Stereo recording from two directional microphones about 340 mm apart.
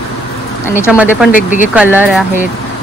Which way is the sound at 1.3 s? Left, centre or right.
Left.